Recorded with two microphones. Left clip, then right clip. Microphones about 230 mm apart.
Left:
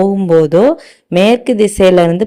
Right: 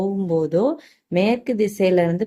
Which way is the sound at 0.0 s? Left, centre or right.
Left.